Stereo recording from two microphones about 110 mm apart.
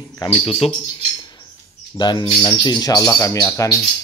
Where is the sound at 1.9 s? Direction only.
40° left (ahead or behind).